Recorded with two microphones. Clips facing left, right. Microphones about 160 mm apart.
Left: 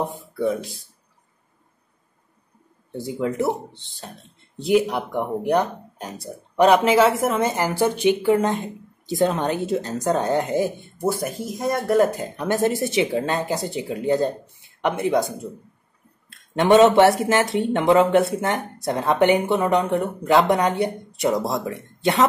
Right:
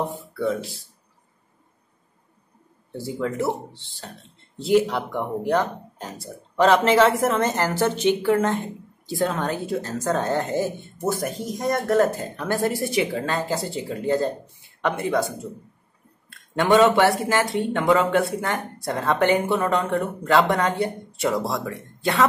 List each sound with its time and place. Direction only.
0.4 s a woman's voice: 15° left (ahead or behind)
3.0 s a woman's voice: 20° left (ahead or behind)
16.5 s speech: 20° left (ahead or behind)